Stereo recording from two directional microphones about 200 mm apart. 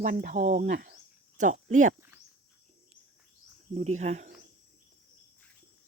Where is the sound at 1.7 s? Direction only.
40° right (ahead or behind).